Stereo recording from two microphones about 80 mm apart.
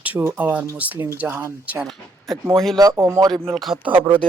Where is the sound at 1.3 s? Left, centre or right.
Right.